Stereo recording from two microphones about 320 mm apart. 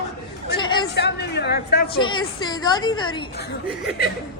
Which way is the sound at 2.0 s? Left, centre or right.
Centre.